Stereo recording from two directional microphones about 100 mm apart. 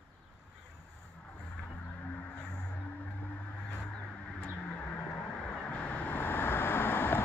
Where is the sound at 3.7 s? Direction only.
15° left (ahead or behind).